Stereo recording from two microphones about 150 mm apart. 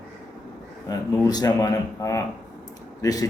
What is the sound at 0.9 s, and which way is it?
A man's voice, 25° left (ahead or behind).